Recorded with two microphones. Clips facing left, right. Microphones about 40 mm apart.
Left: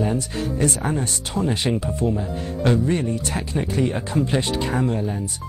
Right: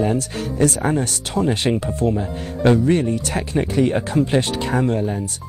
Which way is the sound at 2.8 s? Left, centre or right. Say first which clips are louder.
Right 4 dB; right.